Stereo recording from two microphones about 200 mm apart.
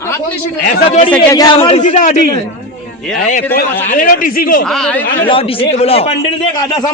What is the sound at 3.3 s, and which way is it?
Speech, 40° left (ahead or behind).